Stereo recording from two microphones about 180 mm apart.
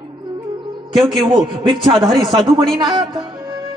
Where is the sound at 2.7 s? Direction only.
25° right (ahead or behind).